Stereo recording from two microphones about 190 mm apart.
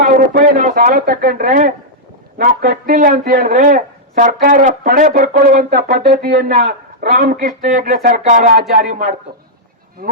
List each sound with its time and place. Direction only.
0.1 s speech: 50° right (ahead or behind)